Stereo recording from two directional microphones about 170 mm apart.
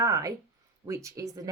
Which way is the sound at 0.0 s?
20° right (ahead or behind).